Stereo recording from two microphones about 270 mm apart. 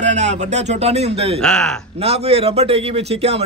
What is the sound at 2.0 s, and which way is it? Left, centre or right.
Speech, right.